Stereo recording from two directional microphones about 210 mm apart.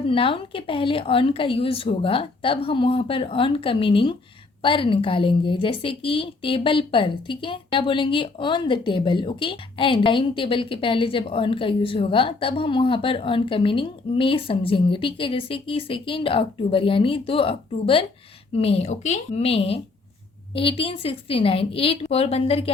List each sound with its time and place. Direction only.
0.1 s speech: 25° left (ahead or behind)